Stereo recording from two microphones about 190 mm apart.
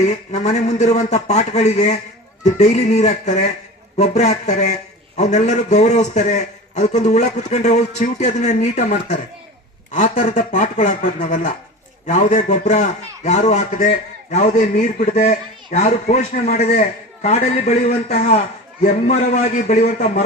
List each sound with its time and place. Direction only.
0.0 s a man's voice: 35° left (ahead or behind)